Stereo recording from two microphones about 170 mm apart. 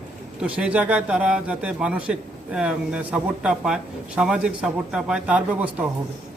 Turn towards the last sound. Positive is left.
turn(degrees=-10)  # may be behind; listen again after turning